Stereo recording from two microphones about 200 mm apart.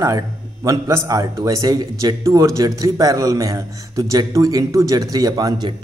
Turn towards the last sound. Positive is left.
turn(degrees=-20)  # may be behind; listen again after turning